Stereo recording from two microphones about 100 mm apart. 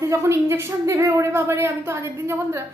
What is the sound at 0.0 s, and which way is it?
A woman's voice, 30° right (ahead or behind).